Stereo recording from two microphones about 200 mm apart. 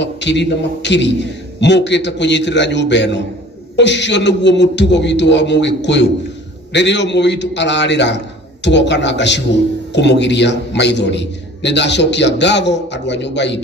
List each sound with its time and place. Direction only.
0.0 s a man's voice: 60° left (ahead or behind)